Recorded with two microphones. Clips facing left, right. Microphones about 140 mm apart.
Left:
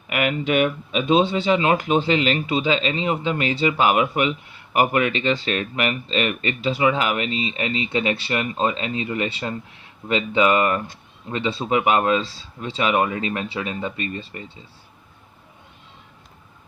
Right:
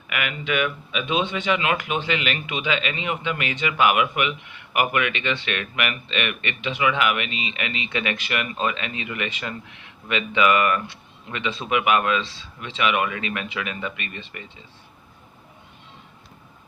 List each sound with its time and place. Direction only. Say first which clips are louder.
0.1 s speech: left 6 dB; 40° left (ahead or behind)